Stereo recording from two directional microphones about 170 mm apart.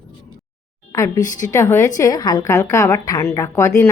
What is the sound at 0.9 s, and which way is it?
A woman's voice, 15° left (ahead or behind).